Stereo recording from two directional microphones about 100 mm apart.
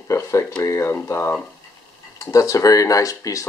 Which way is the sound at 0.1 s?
30° left (ahead or behind).